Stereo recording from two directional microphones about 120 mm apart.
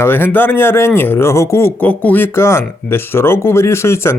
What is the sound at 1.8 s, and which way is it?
Speech, 15° left (ahead or behind).